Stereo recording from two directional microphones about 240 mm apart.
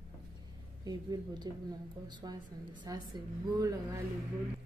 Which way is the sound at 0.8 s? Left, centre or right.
Centre.